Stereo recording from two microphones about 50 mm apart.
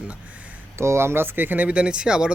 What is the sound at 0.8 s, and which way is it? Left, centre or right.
Speech, right.